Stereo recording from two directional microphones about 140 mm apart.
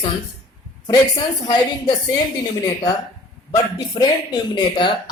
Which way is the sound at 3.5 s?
25° left (ahead or behind).